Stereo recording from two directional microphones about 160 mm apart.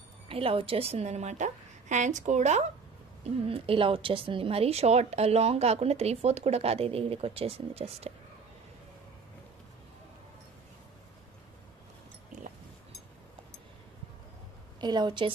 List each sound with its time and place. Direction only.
0.3 s a woman's voice: 35° right (ahead or behind)
3.3 s a woman's voice: 35° right (ahead or behind)
14.8 s a woman's voice: 25° right (ahead or behind)